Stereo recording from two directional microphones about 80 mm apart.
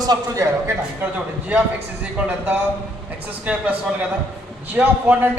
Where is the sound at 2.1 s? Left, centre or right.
Right.